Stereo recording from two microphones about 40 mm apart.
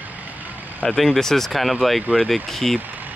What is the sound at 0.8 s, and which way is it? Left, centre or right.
Speech, centre.